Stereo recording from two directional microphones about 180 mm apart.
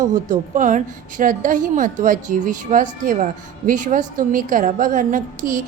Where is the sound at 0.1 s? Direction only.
45° right (ahead or behind).